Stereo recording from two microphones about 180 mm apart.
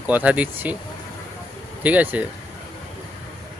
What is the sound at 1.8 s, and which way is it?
Speech, 10° right (ahead or behind).